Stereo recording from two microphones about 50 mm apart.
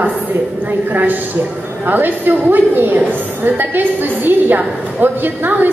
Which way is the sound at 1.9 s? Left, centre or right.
Right.